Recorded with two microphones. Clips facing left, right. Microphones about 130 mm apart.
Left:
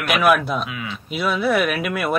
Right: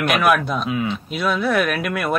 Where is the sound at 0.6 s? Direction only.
35° right (ahead or behind).